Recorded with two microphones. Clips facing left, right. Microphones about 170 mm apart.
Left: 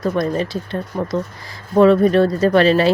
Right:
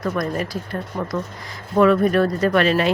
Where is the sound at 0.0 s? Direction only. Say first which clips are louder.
Left 4 dB; 25° left (ahead or behind).